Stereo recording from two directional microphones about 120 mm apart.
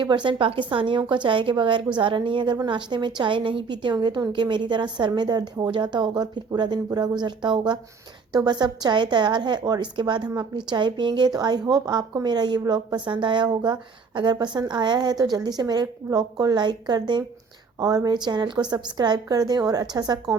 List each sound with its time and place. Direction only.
0.0 s a woman's voice: 40° right (ahead or behind)